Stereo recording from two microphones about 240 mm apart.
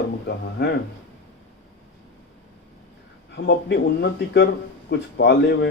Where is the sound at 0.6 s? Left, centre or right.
Left.